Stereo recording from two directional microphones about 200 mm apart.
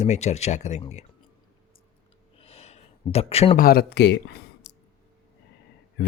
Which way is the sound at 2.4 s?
30° left (ahead or behind).